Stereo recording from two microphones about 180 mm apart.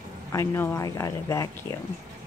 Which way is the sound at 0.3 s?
15° left (ahead or behind).